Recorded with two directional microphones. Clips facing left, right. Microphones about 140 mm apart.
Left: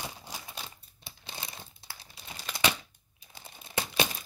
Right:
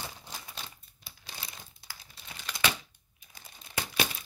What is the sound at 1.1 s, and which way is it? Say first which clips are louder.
Crumpling: left 3 dB; 25° left (ahead or behind).